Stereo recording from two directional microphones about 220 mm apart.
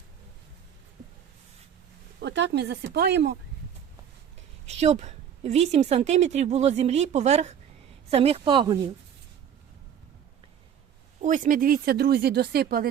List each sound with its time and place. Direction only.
2.2 s speech: 55° right (ahead or behind)
4.6 s a woman's voice: 30° right (ahead or behind)
11.2 s speech: 35° right (ahead or behind)